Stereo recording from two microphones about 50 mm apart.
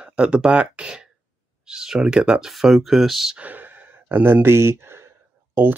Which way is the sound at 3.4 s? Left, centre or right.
Right.